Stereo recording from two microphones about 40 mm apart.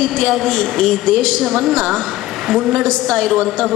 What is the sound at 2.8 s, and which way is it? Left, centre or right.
Speech, centre.